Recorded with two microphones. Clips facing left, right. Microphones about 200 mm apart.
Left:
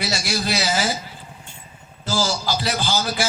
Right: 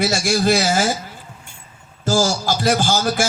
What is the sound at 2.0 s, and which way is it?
A man's voice, 45° right (ahead or behind).